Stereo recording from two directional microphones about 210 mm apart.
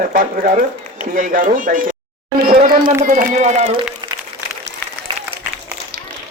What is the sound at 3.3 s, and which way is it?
Speech, 35° right (ahead or behind).